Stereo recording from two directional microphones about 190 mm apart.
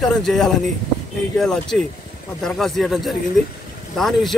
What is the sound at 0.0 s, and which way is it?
Speech, centre (ahead or behind).